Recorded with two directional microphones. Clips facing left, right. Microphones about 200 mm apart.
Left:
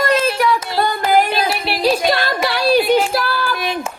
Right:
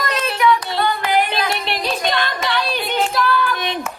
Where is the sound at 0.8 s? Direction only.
45° left (ahead or behind).